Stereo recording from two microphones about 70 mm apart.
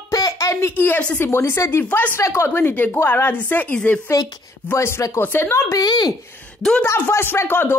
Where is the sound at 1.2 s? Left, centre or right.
Left.